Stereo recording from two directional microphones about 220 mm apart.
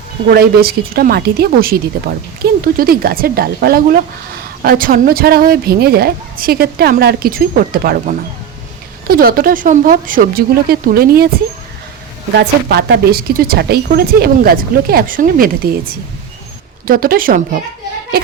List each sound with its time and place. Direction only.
0.3 s speech: 45° right (ahead or behind)
12.4 s speech: 45° right (ahead or behind)